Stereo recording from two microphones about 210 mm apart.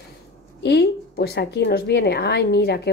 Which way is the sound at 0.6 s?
50° left (ahead or behind).